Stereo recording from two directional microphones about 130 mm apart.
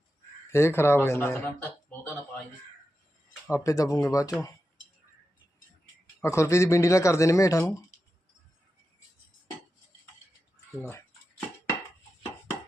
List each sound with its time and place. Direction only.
0.5 s speech: 20° left (ahead or behind)
3.5 s speech: 25° left (ahead or behind)
6.2 s speech: 20° left (ahead or behind)
10.8 s dishes: 20° left (ahead or behind)